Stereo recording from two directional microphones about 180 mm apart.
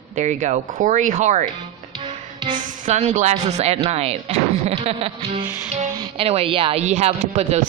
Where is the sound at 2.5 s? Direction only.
40° right (ahead or behind).